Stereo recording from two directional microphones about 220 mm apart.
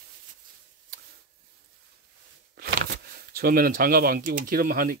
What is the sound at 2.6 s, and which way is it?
Speech, 45° right (ahead or behind).